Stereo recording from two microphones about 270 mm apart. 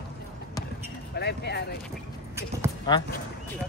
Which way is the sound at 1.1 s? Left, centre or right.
Left.